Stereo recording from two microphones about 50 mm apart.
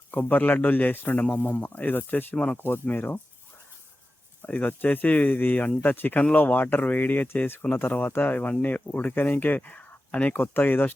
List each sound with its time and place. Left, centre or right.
0.1 s a man's voice: left
2.3 s speech: centre
2.6 s a man's voice: left
4.4 s a man's voice: left
10.3 s a man's voice: left